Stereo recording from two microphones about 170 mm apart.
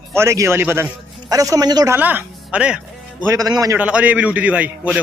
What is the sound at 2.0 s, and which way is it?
Speech, 10° right (ahead or behind).